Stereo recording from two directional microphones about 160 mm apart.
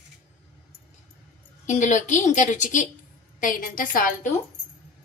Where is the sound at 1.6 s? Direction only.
50° left (ahead or behind).